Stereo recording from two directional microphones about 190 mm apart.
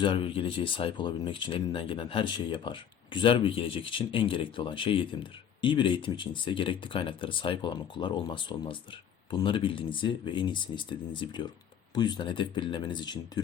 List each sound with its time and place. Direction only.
0.0 s speech: 25° left (ahead or behind)